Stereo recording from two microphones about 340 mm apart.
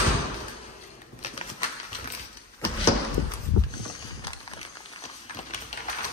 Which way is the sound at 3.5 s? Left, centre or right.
Left.